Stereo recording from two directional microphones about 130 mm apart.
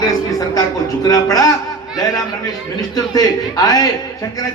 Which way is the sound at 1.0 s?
30° left (ahead or behind).